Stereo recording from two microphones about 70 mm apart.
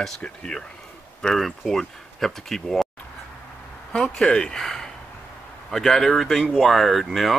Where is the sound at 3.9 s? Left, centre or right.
Centre.